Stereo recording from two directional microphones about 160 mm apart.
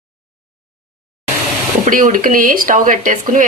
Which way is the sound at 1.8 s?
55° right (ahead or behind).